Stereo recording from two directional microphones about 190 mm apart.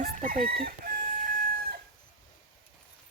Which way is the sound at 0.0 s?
45° right (ahead or behind).